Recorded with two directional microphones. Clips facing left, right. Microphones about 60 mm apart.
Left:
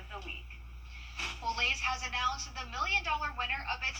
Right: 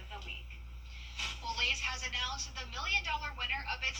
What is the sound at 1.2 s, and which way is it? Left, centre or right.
A woman's voice, left.